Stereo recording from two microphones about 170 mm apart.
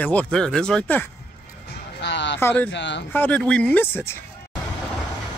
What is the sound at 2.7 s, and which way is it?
Speech, 90° left.